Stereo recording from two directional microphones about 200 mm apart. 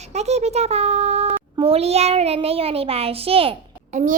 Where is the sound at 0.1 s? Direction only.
35° right (ahead or behind).